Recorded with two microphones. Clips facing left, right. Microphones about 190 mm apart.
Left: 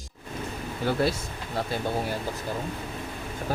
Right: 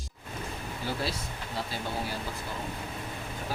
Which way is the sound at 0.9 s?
55° left (ahead or behind).